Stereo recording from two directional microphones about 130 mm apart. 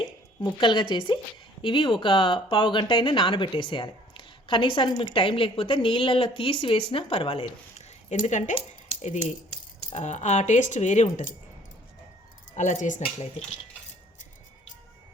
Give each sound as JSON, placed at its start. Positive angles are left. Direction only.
{"t": 0.6, "sound": "speech", "side_deg": 35}
{"t": 12.5, "sound": "speech", "side_deg": 70}